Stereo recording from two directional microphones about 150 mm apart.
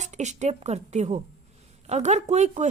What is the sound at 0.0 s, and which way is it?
Speech, 50° right (ahead or behind).